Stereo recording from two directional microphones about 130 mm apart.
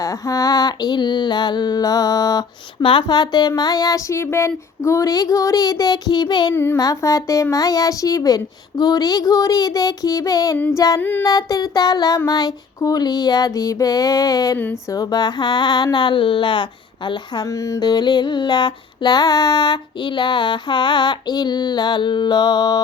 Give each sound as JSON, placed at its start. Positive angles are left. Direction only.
{"t": 0.0, "sound": "speech", "side_deg": 25}
{"t": 6.5, "sound": "child singing", "side_deg": 15}
{"t": 6.7, "sound": "speech", "side_deg": 25}
{"t": 14.6, "sound": "a sound", "side_deg": 20}